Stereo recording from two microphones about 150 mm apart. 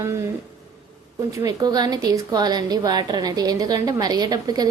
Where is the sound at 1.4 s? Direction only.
25° right (ahead or behind).